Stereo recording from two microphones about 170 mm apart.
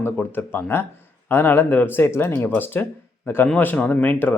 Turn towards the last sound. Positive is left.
turn(degrees=10)  # may be behind; listen again after turning